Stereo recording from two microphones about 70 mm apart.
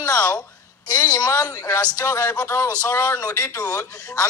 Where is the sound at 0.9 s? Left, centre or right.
Left.